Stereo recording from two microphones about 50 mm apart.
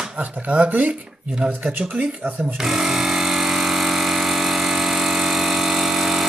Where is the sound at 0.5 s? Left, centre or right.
Right.